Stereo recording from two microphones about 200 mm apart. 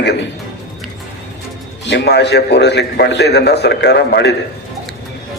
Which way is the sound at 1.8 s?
60° left (ahead or behind).